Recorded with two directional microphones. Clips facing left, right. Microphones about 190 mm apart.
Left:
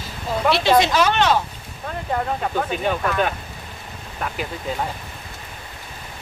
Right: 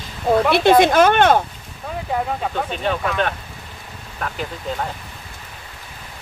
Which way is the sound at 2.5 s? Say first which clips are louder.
Left 1 dB; 5° left (ahead or behind).